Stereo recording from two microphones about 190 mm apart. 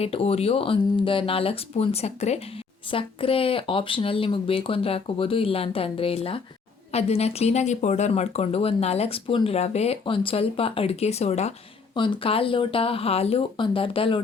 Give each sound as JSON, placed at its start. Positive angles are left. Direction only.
{"t": 0.0, "sound": "speech", "side_deg": 30}